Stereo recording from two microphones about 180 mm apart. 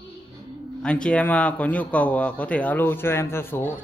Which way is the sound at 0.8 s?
5° left (ahead or behind).